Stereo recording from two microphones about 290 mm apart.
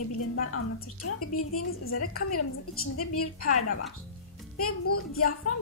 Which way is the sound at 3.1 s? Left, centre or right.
Left.